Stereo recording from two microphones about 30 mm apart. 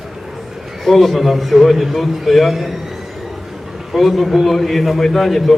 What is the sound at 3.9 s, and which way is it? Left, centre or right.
A man's voice, centre.